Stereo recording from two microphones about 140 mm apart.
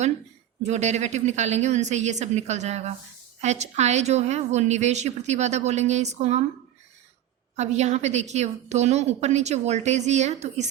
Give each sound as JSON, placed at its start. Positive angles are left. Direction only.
{"t": 0.6, "sound": "a woman's voice", "side_deg": -55}
{"t": 7.5, "sound": "a woman's voice", "side_deg": -55}